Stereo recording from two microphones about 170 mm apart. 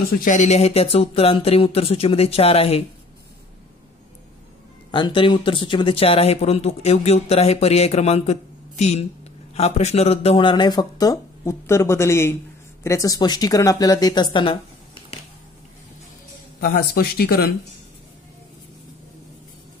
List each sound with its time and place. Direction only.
0.2 s speech: 45° left (ahead or behind)
4.9 s speech: 30° left (ahead or behind)
16.5 s speech: 60° left (ahead or behind)